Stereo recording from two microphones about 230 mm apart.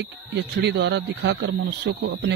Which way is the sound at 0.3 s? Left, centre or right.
Right.